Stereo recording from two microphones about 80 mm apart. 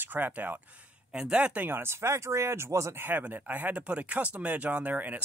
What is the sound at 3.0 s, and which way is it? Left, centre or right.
Speech, right.